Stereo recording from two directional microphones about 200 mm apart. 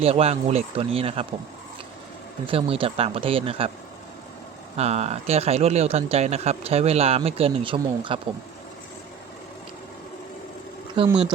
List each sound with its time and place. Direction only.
0.0 s speech: 30° right (ahead or behind)
2.5 s speech: 25° right (ahead or behind)
4.8 s speech: 30° right (ahead or behind)
10.9 s speech: 25° right (ahead or behind)